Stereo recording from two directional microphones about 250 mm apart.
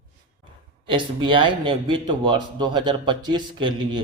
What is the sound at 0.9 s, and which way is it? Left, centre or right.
A man's voice, centre.